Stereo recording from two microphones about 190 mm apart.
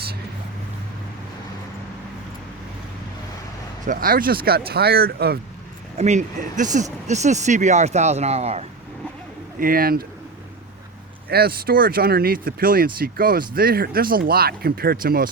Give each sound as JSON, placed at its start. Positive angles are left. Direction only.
{"t": 3.8, "sound": "speech", "side_deg": -50}
{"t": 6.0, "sound": "speech", "side_deg": -40}
{"t": 9.6, "sound": "speech", "side_deg": -50}
{"t": 11.3, "sound": "speech", "side_deg": -55}